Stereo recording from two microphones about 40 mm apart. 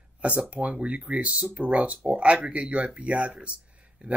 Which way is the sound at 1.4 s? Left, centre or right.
Right.